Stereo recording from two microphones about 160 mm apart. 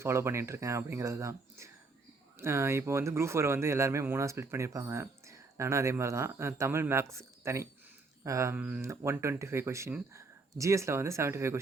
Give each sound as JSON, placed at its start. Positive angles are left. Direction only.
{"t": 0.0, "sound": "speech", "side_deg": -15}
{"t": 8.2, "sound": "a sound", "side_deg": -20}
{"t": 8.5, "sound": "speech", "side_deg": -15}